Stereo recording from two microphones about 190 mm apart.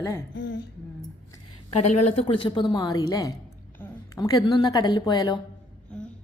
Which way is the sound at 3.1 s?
15° left (ahead or behind).